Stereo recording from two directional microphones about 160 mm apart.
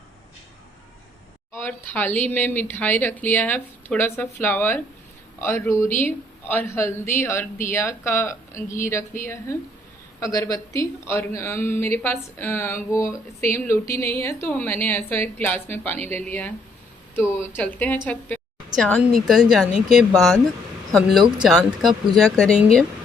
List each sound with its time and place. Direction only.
1.5 s a man's voice: 15° left (ahead or behind)